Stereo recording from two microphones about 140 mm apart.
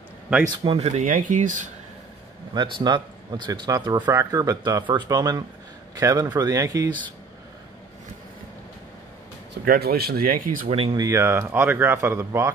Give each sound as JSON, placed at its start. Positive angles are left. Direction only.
{"t": 0.7, "sound": "speech", "side_deg": -55}
{"t": 1.1, "sound": "speech", "side_deg": -65}
{"t": 2.5, "sound": "speech", "side_deg": -30}
{"t": 9.7, "sound": "speech", "side_deg": -90}
{"t": 10.7, "sound": "speech", "side_deg": -40}
{"t": 11.0, "sound": "speech", "side_deg": -20}